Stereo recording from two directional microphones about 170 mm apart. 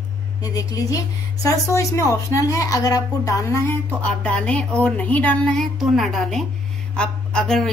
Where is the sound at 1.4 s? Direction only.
20° left (ahead or behind).